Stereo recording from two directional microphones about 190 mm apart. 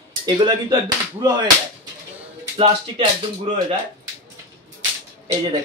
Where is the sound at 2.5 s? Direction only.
25° right (ahead or behind).